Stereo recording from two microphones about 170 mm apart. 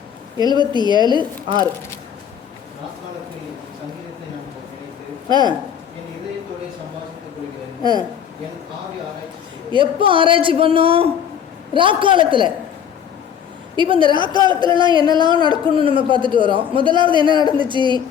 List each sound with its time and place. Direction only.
0.3 s a man's voice: 25° right (ahead or behind)
5.3 s a man's voice: 25° right (ahead or behind)
9.7 s a man's voice: 30° right (ahead or behind)
13.7 s a man's voice: 30° right (ahead or behind)